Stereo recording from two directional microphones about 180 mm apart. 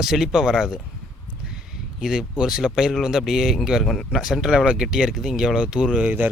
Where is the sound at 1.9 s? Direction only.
5° right (ahead or behind).